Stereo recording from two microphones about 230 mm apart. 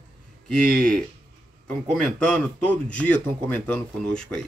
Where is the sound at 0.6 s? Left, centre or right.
Right.